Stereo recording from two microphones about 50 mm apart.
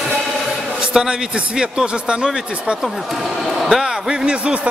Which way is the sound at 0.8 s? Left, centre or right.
Centre.